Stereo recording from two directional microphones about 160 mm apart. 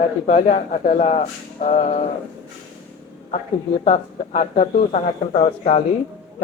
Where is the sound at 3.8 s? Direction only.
50° left (ahead or behind).